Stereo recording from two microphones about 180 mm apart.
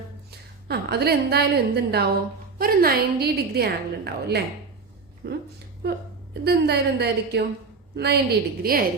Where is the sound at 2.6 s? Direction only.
55° right (ahead or behind).